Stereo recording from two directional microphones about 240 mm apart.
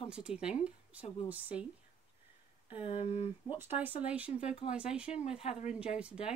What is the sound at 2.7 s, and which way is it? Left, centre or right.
Speech, left.